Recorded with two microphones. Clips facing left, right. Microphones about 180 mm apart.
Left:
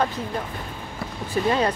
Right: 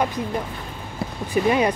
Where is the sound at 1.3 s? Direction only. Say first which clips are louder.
Right 2 dB; 15° right (ahead or behind).